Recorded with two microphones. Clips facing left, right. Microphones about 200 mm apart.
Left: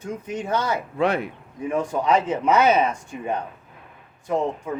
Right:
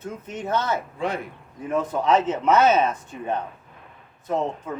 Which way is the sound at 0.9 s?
70° left (ahead or behind).